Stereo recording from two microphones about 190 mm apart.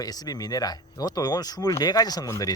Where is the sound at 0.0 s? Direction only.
20° left (ahead or behind).